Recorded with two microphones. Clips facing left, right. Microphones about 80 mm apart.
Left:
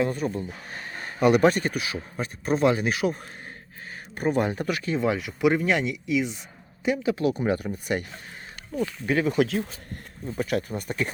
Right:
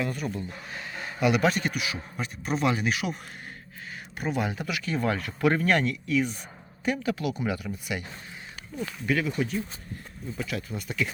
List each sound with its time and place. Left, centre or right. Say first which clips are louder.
0.0 s speech: left 5 dB; left
4.2 s speech: left 5 dB; left
4.9 s speech: left 1 dB; centre
7.2 s speech: left 5 dB; left
9.4 s speech: left 6 dB; left
10.2 s speech: left 6 dB; left